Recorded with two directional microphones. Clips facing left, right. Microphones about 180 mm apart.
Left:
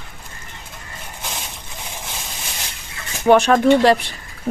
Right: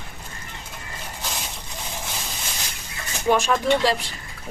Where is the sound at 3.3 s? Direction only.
65° left (ahead or behind).